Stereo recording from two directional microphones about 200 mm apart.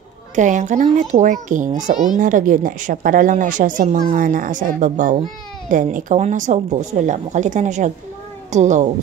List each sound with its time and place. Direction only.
0.4 s a woman's voice: 40° right (ahead or behind)